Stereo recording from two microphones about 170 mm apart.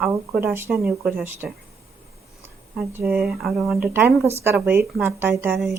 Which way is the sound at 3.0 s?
5° right (ahead or behind).